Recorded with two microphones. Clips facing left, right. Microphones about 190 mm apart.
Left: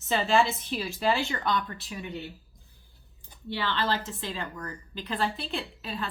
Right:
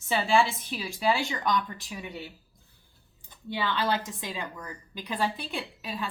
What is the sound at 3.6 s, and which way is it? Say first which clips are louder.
A woman's voice: right 1 dB; 15° right (ahead or behind).